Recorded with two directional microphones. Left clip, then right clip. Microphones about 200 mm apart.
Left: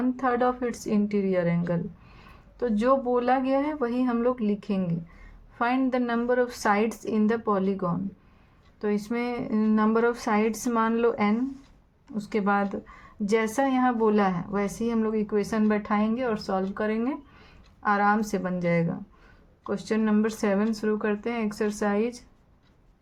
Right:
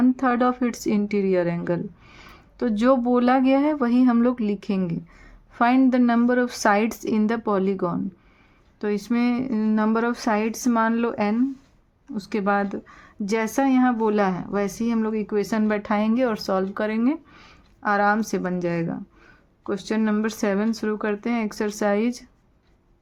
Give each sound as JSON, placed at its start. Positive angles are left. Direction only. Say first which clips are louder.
{"t": 0.0, "sound": "a woman's voice", "louder": "right 4 dB", "side_deg": -35}